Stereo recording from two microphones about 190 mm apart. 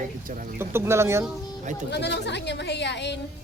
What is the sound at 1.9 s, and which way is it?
A woman's voice, 65° left (ahead or behind).